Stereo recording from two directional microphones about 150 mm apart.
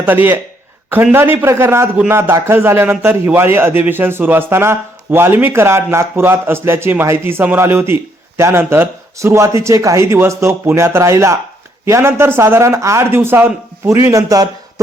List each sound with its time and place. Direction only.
0.1 s a man's voice: 10° right (ahead or behind)